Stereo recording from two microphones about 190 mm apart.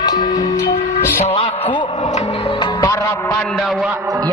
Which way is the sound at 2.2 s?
35° left (ahead or behind).